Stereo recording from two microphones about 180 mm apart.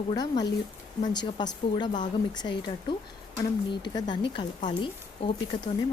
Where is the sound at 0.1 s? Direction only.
20° left (ahead or behind).